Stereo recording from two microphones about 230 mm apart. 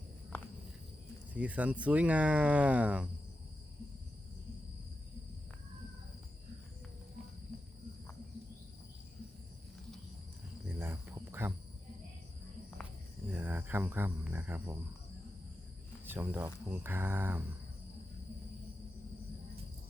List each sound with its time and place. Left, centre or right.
1.3 s speech: centre
10.8 s cricket: centre
13.3 s speech: centre
16.0 s speech: centre